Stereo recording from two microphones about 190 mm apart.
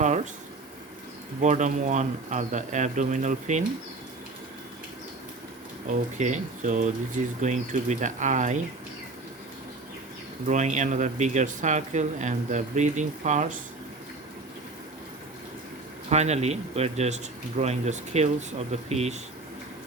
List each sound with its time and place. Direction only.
1.4 s speech: 40° right (ahead or behind)
5.9 s speech: 40° right (ahead or behind)
10.5 s speech: 40° right (ahead or behind)
16.0 s speech: 35° right (ahead or behind)